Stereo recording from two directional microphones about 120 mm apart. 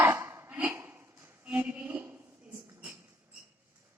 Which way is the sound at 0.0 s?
20° right (ahead or behind).